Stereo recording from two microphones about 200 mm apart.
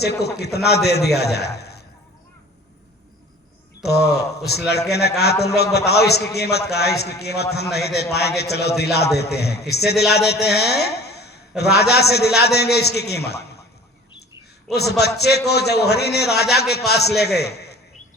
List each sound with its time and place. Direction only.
0.0 s a man's voice: 55° left (ahead or behind)
1.5 s a sound: 55° left (ahead or behind)
3.8 s a man's voice: 55° left (ahead or behind)
14.7 s a man's voice: 55° left (ahead or behind)